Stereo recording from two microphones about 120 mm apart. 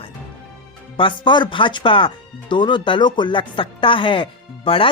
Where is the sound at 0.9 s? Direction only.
45° left (ahead or behind).